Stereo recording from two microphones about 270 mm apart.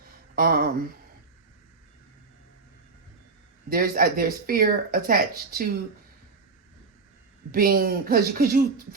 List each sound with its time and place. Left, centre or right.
0.3 s speech: right
3.7 s speech: right
7.5 s speech: right